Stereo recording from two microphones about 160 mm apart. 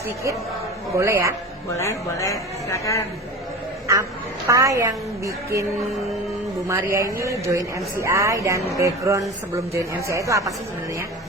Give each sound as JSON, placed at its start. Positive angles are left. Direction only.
{"t": 0.9, "sound": "a woman's voice", "side_deg": -15}
{"t": 1.7, "sound": "speech", "side_deg": 20}
{"t": 3.9, "sound": "speech", "side_deg": -20}
{"t": 6.7, "sound": "a woman's voice", "side_deg": -20}